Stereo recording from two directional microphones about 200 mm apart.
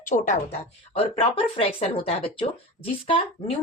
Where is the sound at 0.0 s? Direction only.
40° left (ahead or behind).